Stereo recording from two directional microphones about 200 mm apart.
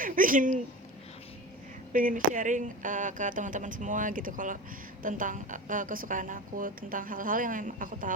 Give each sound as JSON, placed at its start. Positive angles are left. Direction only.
{"t": 0.0, "sound": "speech", "side_deg": -40}
{"t": 1.9, "sound": "a woman's voice", "side_deg": -40}